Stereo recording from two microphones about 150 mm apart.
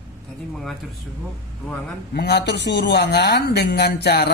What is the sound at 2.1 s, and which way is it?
Speech, 90° left.